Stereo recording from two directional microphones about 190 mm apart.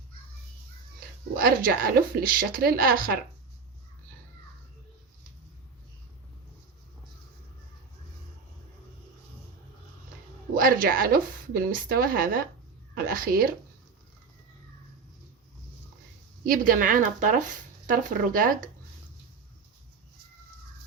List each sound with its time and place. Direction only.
1.4 s speech: 50° right (ahead or behind)
10.5 s a sound: 45° right (ahead or behind)
11.5 s speech: 50° right (ahead or behind)
16.5 s speech: 45° right (ahead or behind)